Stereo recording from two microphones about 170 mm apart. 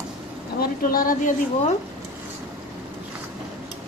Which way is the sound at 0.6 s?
55° left (ahead or behind).